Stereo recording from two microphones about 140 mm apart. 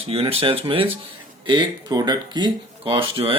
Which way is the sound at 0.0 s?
45° right (ahead or behind).